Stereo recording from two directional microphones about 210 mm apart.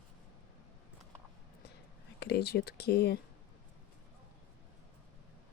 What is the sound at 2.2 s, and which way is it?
Speech, 50° left (ahead or behind).